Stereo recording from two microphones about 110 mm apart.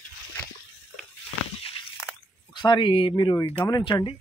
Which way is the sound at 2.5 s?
45° left (ahead or behind).